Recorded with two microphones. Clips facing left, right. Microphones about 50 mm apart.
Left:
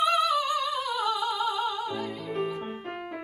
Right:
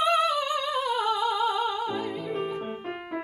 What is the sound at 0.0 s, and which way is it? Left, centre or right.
Music, right.